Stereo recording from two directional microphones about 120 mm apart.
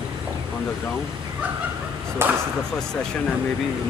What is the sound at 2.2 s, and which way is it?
Speech, 20° right (ahead or behind).